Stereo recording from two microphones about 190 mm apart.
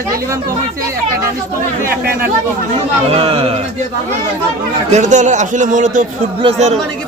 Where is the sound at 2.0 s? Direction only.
50° right (ahead or behind).